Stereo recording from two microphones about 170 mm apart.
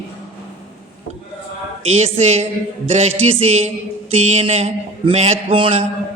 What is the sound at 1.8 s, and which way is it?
A man's voice, 40° right (ahead or behind).